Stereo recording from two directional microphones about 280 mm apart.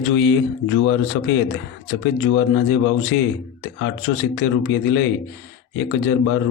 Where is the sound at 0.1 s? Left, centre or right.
Left.